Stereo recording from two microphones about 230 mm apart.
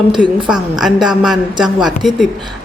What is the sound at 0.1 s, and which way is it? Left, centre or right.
Speech, right.